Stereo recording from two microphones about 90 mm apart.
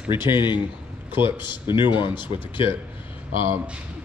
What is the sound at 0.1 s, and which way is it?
Speech, 60° left (ahead or behind).